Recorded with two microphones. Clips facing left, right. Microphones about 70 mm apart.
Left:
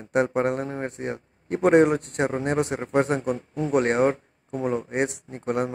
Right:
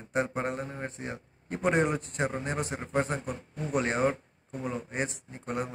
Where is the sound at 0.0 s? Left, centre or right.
Left.